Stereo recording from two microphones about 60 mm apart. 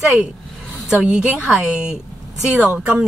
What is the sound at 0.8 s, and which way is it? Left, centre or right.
A woman's voice, centre.